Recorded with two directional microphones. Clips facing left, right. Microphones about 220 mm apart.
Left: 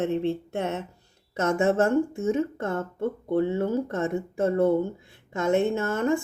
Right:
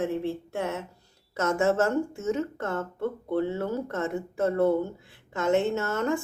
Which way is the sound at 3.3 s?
15° left (ahead or behind).